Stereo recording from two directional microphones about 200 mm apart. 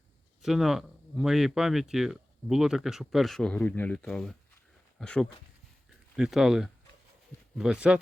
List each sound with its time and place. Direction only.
0.4 s speech: centre (ahead or behind)